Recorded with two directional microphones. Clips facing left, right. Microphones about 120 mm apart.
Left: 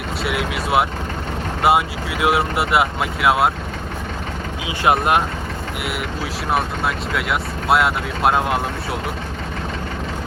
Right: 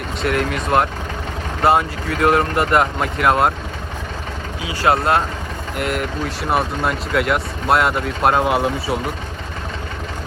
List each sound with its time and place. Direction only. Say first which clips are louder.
0.2 s speech: right 4 dB; 5° left (ahead or behind)
4.6 s speech: right 1 dB; 20° left (ahead or behind)
5.8 s speech: right 6 dB; 5° left (ahead or behind)